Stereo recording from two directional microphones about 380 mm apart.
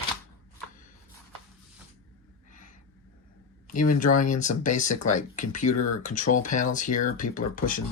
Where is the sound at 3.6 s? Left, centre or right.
Left.